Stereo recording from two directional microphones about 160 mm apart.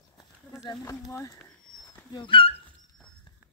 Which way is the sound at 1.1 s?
20° left (ahead or behind).